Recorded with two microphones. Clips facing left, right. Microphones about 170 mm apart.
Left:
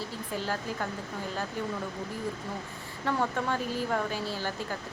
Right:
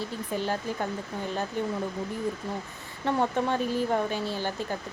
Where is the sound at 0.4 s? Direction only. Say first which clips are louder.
Right 2 dB; 20° right (ahead or behind).